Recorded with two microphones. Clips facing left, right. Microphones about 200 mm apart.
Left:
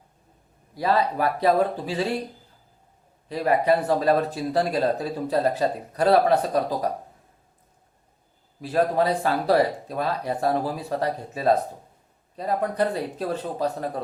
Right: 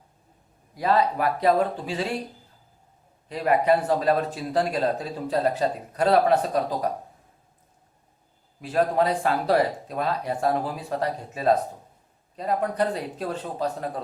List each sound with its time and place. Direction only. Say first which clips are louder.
0.8 s a man's voice: even; 35° left (ahead or behind)
3.3 s a man's voice: even; 35° left (ahead or behind)
8.6 s a man's voice: left 1 dB; 35° left (ahead or behind)